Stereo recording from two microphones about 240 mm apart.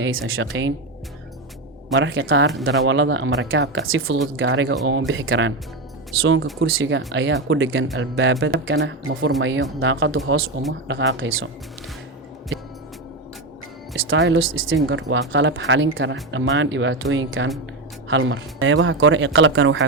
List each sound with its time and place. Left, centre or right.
0.0 s speech: right
2.0 s speech: right
14.1 s speech: right